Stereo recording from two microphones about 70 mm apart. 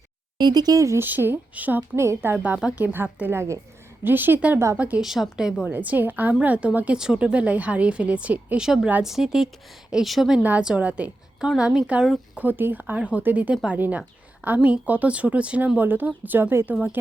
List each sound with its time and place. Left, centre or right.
0.3 s speech: right
1.0 s speech: right
2.0 s a woman's voice: right
2.3 s speech: right
4.9 s a woman's voice: centre
5.7 s speech: right
8.5 s a woman's voice: centre
10.8 s speech: right
11.3 s a woman's voice: centre
12.3 s speech: right
13.0 s speech: centre
16.7 s speech: right